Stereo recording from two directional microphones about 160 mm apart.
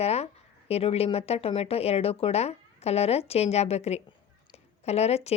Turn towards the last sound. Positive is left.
turn(degrees=40)  # may be behind; listen again after turning